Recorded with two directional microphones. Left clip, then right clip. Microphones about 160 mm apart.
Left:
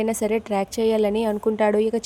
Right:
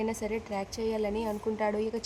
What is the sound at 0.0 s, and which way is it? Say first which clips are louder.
Speech: left 10 dB; 45° left (ahead or behind).